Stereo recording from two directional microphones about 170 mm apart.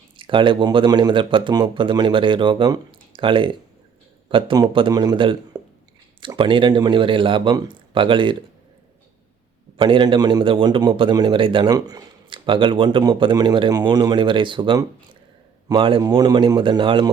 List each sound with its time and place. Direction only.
0.2 s a man's voice: 30° right (ahead or behind)
9.7 s a man's voice: 30° right (ahead or behind)